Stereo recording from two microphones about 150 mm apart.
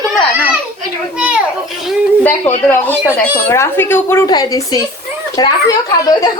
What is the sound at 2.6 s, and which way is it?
A woman's voice, 15° left (ahead or behind).